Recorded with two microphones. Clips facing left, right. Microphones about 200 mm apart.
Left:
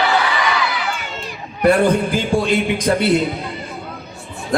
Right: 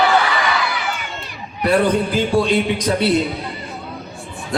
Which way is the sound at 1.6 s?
50° left (ahead or behind).